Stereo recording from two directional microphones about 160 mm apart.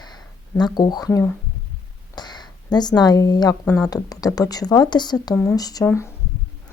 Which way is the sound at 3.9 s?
20° left (ahead or behind).